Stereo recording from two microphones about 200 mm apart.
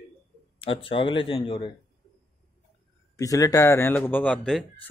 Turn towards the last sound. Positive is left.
turn(degrees=5)  # may be behind; listen again after turning